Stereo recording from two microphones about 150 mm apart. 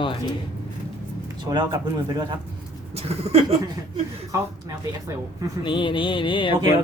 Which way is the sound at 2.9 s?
45° right (ahead or behind).